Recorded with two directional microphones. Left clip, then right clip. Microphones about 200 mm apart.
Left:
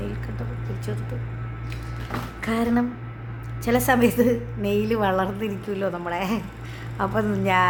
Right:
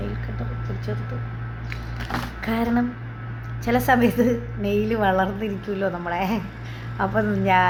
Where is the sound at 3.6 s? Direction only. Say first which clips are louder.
Right 1 dB; 20° left (ahead or behind).